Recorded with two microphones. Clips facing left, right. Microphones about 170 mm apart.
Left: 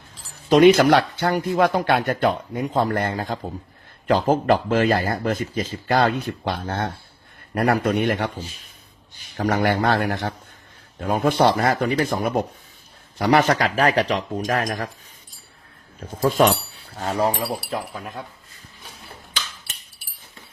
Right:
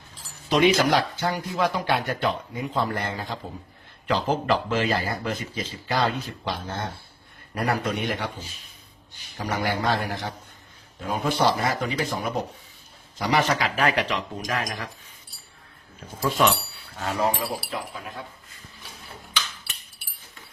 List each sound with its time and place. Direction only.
0.4 s speech: 50° left (ahead or behind)
9.4 s speech: 55° left (ahead or behind)
16.4 s speech: 45° left (ahead or behind)
17.7 s speech: 45° left (ahead or behind)